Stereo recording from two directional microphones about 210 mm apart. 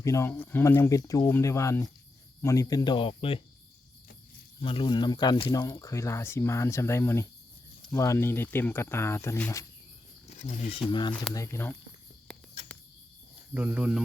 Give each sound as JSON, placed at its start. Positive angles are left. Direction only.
{"t": 0.0, "sound": "speech", "side_deg": 15}
{"t": 4.6, "sound": "speech", "side_deg": 25}
{"t": 10.2, "sound": "speech", "side_deg": 35}
{"t": 10.8, "sound": "speech", "side_deg": 20}
{"t": 11.1, "sound": "speech", "side_deg": 5}
{"t": 13.5, "sound": "cricket", "side_deg": -5}